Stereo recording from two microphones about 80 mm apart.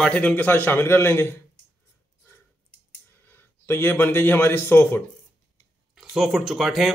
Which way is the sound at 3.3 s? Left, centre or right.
Left.